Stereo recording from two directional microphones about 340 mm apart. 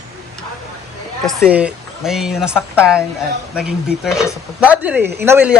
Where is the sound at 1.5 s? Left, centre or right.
Centre.